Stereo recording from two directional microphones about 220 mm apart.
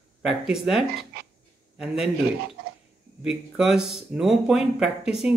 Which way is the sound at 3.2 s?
5° right (ahead or behind).